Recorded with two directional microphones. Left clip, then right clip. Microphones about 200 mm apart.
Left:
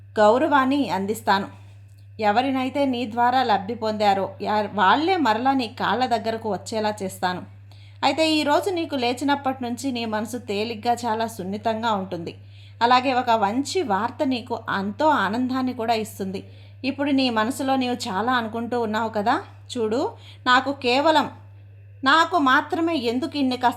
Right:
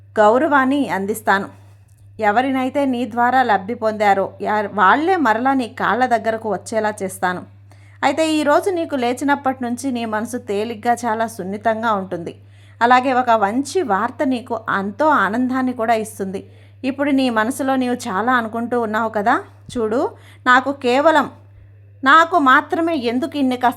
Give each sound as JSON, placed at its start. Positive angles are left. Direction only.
{"t": 0.1, "sound": "speech", "side_deg": -20}